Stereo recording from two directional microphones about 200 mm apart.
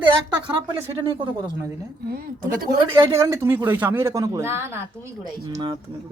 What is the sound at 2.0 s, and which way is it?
Speech, 45° right (ahead or behind).